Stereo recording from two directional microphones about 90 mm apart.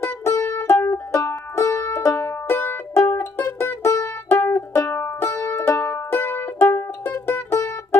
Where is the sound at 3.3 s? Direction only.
25° left (ahead or behind).